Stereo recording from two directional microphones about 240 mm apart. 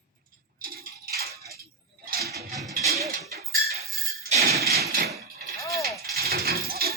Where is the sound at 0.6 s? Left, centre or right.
Right.